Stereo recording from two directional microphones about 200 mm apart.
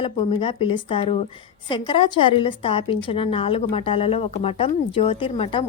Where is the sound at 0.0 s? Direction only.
25° left (ahead or behind).